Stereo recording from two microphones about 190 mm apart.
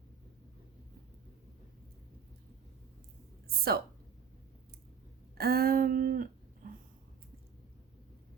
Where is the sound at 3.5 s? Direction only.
55° right (ahead or behind).